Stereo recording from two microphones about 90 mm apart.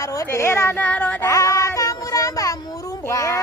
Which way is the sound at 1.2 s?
35° left (ahead or behind).